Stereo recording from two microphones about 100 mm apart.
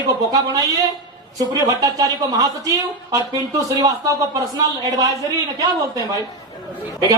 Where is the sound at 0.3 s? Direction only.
35° right (ahead or behind).